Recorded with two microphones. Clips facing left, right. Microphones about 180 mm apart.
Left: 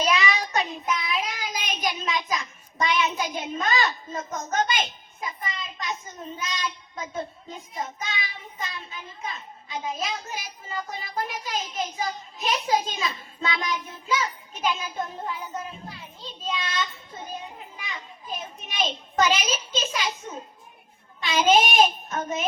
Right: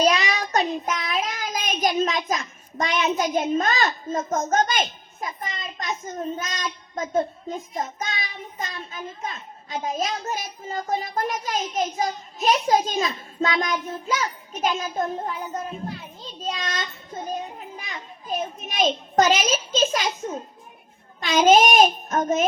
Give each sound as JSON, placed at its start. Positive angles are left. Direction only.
{"t": 0.0, "sound": "child singing", "side_deg": -40}
{"t": 8.5, "sound": "a child's voice", "side_deg": -45}
{"t": 16.4, "sound": "a child's voice", "side_deg": -45}
{"t": 18.7, "sound": "a child's voice", "side_deg": -45}